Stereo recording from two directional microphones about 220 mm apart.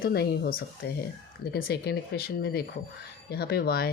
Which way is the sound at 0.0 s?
45° left (ahead or behind).